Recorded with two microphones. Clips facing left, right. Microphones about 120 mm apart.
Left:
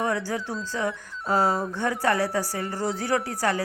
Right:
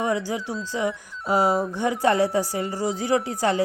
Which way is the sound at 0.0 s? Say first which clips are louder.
Right 2 dB; 15° right (ahead or behind).